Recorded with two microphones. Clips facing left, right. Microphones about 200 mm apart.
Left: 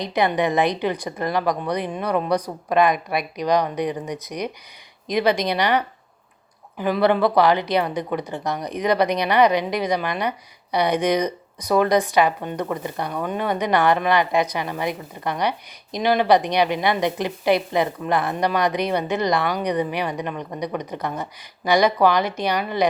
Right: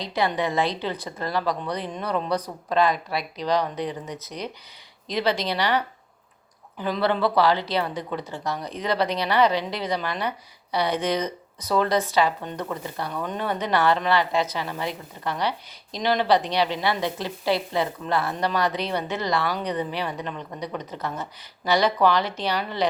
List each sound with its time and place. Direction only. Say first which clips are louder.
0.0 s a woman's voice: left 4 dB; 15° left (ahead or behind)